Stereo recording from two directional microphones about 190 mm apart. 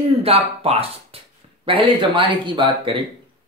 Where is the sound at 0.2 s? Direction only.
30° right (ahead or behind).